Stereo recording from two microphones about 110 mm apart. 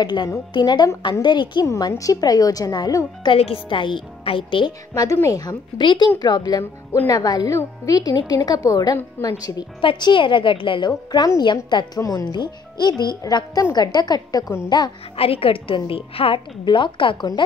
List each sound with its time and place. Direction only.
0.0 s a woman's voice: 40° left (ahead or behind)
1.7 s speech: 35° left (ahead or behind)
3.3 s a woman's voice: 60° left (ahead or behind)
4.9 s speech: 30° left (ahead or behind)
5.8 s speech: 45° left (ahead or behind)
6.6 s speech: 20° left (ahead or behind)
7.1 s speech: 35° left (ahead or behind)
9.8 s a woman's voice: 45° left (ahead or behind)
11.1 s speech: 35° left (ahead or behind)
12.3 s speech: 40° left (ahead or behind)
15.1 s a woman's voice: 60° left (ahead or behind)